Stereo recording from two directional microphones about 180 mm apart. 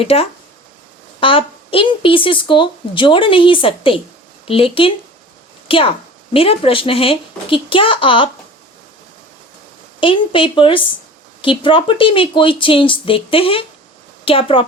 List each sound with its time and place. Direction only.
0.0 s a woman's voice: 35° left (ahead or behind)
10.0 s a woman's voice: 30° left (ahead or behind)